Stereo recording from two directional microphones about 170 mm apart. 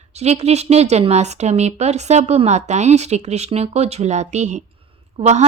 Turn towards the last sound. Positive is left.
turn(degrees=-40)  # may be behind; listen again after turning